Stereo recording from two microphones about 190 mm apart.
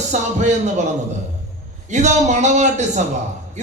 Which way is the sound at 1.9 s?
40° right (ahead or behind).